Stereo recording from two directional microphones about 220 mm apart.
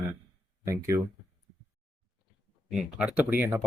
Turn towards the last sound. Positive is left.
turn(degrees=-10)  # may be behind; listen again after turning